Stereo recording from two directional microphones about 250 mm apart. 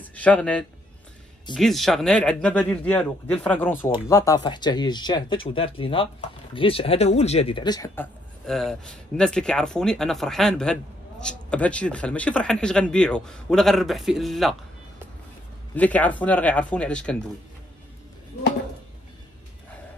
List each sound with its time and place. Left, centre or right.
0.0 s a man's voice: centre
15.7 s speech: centre